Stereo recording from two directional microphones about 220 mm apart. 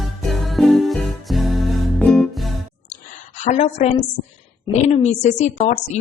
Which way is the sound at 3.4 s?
30° left (ahead or behind).